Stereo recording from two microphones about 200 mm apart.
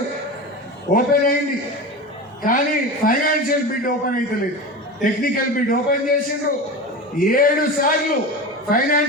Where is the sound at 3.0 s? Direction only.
45° left (ahead or behind).